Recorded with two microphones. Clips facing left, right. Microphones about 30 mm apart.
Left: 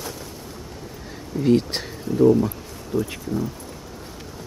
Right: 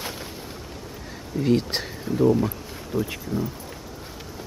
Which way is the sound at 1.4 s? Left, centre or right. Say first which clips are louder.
Left 3 dB; centre.